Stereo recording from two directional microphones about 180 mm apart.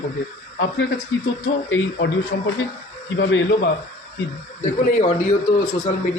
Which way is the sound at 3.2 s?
85° left.